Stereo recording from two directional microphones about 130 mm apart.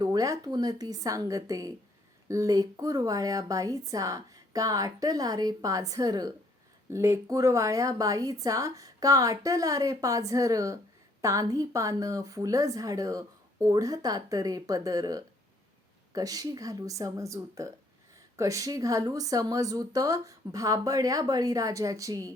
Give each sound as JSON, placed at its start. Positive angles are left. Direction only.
{"t": 0.0, "sound": "a woman's voice", "side_deg": -25}